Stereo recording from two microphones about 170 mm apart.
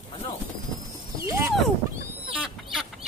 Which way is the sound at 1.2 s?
15° right (ahead or behind).